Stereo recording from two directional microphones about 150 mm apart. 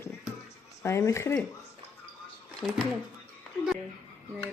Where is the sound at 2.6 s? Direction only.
5° left (ahead or behind).